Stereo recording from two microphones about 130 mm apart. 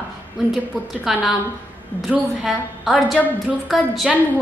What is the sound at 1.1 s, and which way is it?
A woman's voice, 5° right (ahead or behind).